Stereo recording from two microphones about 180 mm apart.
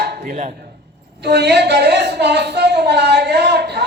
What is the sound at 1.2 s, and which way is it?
A woman's voice, 70° right (ahead or behind).